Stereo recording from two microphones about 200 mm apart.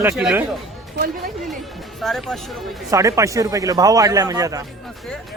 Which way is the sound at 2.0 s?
Centre (ahead or behind).